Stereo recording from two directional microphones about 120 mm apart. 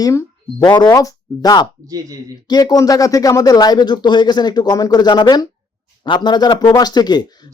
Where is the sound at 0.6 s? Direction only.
35° left (ahead or behind).